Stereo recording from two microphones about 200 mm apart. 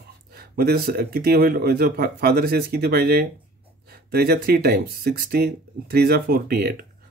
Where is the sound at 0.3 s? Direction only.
55° right (ahead or behind).